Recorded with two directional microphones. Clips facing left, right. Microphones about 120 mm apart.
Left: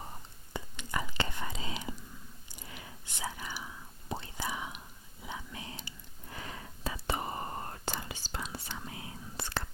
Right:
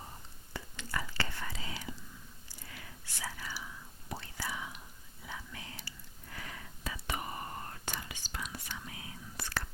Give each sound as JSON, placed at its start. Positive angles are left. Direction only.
{"t": 0.5, "sound": "whispering", "side_deg": 20}